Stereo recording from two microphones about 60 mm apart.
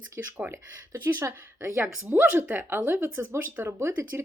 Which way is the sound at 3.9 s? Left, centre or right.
Right.